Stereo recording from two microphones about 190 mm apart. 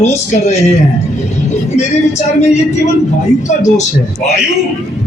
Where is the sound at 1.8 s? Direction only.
35° left (ahead or behind).